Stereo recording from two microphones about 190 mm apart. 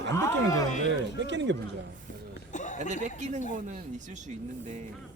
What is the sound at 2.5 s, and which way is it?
Chuckle, 40° left (ahead or behind).